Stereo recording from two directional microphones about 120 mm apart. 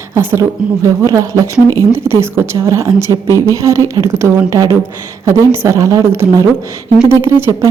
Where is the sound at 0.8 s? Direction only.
25° right (ahead or behind).